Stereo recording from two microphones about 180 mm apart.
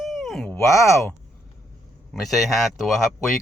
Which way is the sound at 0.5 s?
15° left (ahead or behind).